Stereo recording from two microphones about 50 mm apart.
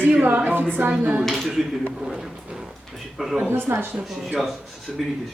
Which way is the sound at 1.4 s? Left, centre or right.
Centre.